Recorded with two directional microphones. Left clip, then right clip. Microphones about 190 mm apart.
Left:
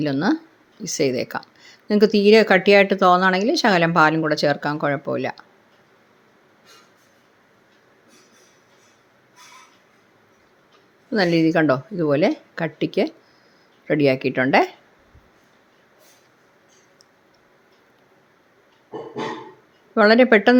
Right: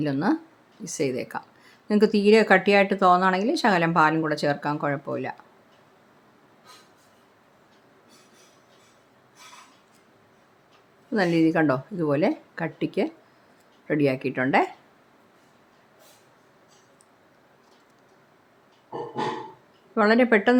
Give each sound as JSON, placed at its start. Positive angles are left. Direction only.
{"t": 0.0, "sound": "speech", "side_deg": 15}
{"t": 11.1, "sound": "speech", "side_deg": 15}
{"t": 19.9, "sound": "speech", "side_deg": 20}